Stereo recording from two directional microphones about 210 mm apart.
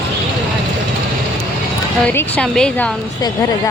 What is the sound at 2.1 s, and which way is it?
Speech, 10° left (ahead or behind).